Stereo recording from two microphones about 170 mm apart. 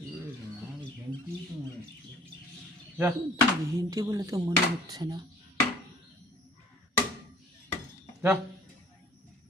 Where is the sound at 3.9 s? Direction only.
20° right (ahead or behind).